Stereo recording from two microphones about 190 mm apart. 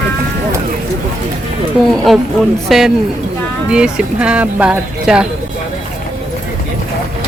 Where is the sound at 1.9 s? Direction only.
Centre (ahead or behind).